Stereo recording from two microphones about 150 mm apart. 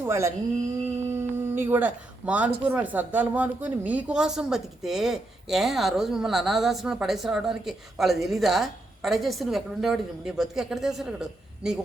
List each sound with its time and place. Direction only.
0.1 s speech: 20° right (ahead or behind)
1.0 s humming: 15° right (ahead or behind)
2.6 s a woman's voice: 10° right (ahead or behind)